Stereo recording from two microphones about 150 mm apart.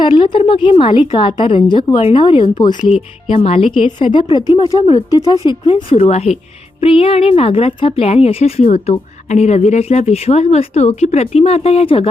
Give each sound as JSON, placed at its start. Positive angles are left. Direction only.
{"t": 0.0, "sound": "a woman's voice", "side_deg": 30}